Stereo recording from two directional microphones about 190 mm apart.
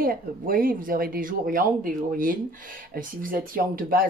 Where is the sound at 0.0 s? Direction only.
50° right (ahead or behind).